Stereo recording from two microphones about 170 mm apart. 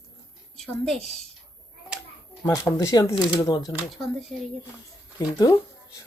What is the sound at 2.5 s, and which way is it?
Speech, 20° left (ahead or behind).